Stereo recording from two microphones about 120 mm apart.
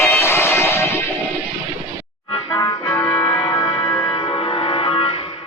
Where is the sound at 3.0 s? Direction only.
55° left (ahead or behind).